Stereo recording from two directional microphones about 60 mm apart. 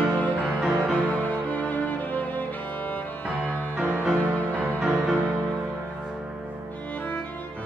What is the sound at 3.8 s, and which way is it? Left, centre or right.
Music, right.